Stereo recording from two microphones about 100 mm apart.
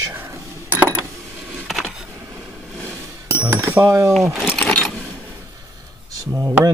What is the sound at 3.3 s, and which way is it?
Speech, 25° right (ahead or behind).